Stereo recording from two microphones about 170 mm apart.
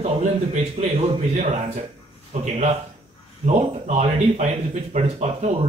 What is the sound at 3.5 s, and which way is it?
A man's voice, 40° right (ahead or behind).